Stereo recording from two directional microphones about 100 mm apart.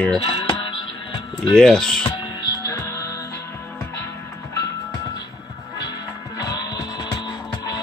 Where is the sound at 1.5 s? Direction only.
5° left (ahead or behind).